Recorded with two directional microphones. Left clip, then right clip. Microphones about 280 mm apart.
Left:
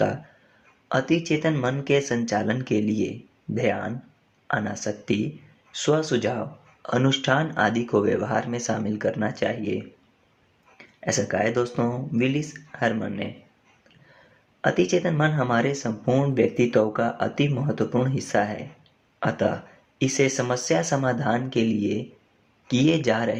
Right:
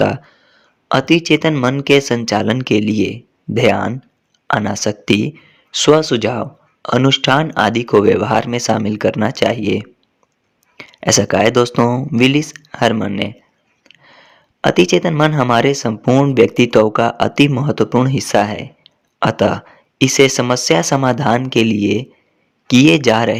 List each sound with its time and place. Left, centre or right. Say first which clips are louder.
0.9 s speech: right 10 dB; right
14.6 s speech: right 9 dB; right